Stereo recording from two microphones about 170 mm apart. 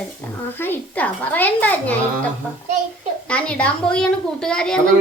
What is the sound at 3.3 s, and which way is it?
A woman's voice, 5° left (ahead or behind).